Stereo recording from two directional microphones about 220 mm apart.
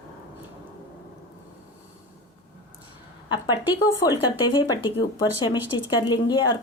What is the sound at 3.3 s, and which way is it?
Speech, 20° left (ahead or behind).